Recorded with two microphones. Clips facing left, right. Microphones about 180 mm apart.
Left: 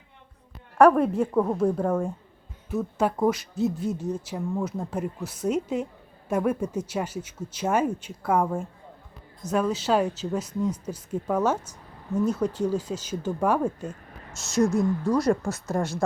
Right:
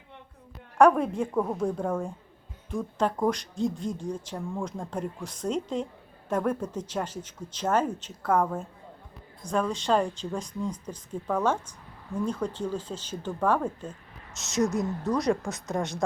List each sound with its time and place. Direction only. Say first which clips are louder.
0.8 s speech: left 3 dB; 5° left (ahead or behind)
14.6 s speech: left 4 dB; 20° right (ahead or behind)
15.0 s speech: left 3 dB; centre (ahead or behind)